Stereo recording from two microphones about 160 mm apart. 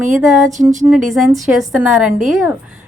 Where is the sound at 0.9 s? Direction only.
Centre (ahead or behind).